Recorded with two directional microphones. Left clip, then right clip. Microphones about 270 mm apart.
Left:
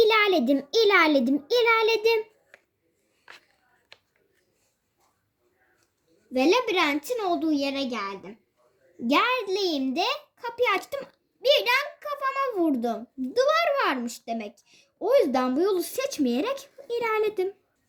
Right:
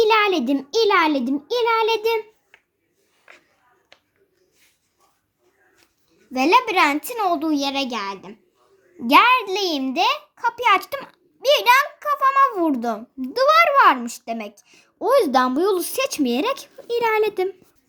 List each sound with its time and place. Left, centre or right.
0.0 s a child's voice: centre
6.3 s a child's voice: centre